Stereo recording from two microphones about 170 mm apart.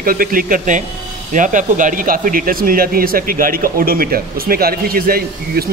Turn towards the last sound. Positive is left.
turn(degrees=-60)  # may be behind; listen again after turning